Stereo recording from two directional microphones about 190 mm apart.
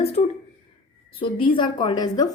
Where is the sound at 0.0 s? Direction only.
30° left (ahead or behind).